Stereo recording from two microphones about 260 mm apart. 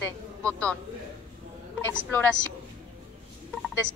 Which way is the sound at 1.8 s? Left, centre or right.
Centre.